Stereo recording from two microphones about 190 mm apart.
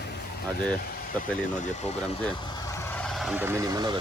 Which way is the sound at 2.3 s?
15° left (ahead or behind).